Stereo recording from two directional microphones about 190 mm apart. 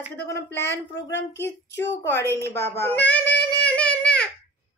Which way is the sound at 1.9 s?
10° left (ahead or behind).